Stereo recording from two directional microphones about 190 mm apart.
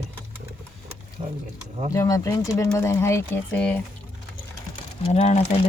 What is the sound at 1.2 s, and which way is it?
Speech, 25° right (ahead or behind).